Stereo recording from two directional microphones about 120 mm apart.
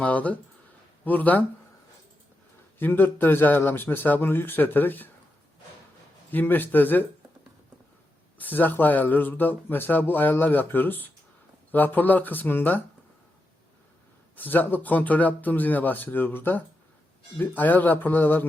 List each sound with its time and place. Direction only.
0.0 s speech: 10° left (ahead or behind)
2.7 s speech: 15° left (ahead or behind)
6.3 s speech: 15° left (ahead or behind)
8.4 s speech: 15° left (ahead or behind)
14.3 s speech: 15° left (ahead or behind)